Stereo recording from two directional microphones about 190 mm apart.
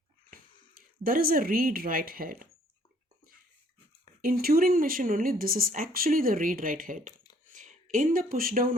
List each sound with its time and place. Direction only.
0.3 s speech: 50° right (ahead or behind)
4.2 s speech: 50° right (ahead or behind)